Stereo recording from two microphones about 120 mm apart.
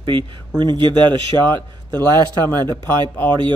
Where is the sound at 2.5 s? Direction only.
35° right (ahead or behind).